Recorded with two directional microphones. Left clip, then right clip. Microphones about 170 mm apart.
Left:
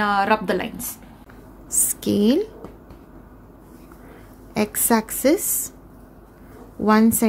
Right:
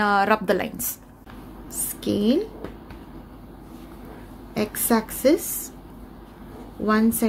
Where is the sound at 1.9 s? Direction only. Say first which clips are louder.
Left 2 dB; 45° left (ahead or behind).